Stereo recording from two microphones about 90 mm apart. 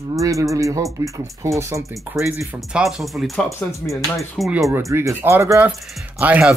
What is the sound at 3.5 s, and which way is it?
Speech, 30° left (ahead or behind).